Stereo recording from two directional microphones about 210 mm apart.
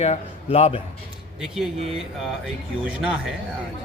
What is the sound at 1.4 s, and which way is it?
Speech, centre (ahead or behind).